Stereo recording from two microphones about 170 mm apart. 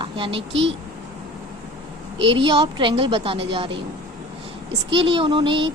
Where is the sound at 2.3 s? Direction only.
30° right (ahead or behind).